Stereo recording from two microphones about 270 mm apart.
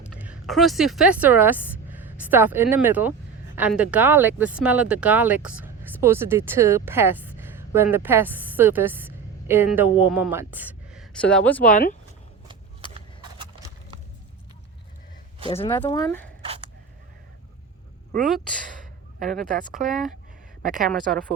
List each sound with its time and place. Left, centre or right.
0.1 s a woman's voice: centre
11.6 s speech: left
13.4 s horse: centre
15.4 s speech: left
18.2 s speech: centre
18.5 s gasp: right
19.7 s speech: right